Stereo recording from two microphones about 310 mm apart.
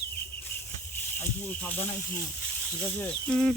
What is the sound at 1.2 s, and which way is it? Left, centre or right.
Speech, centre.